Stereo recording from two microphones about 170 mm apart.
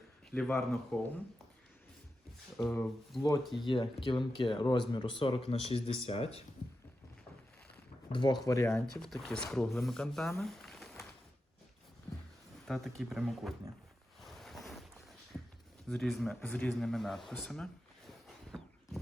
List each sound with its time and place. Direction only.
0.3 s speech: 5° left (ahead or behind)
2.6 s speech: centre (ahead or behind)
3.7 s speech: 30° left (ahead or behind)
8.1 s speech: 25° left (ahead or behind)
9.0 s speech: centre (ahead or behind)
12.6 s speech: centre (ahead or behind)
14.2 s boat: centre (ahead or behind)
15.9 s speech: 5° left (ahead or behind)